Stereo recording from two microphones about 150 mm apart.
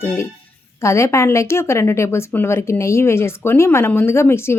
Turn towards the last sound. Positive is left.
turn(degrees=15)  # may be behind; listen again after turning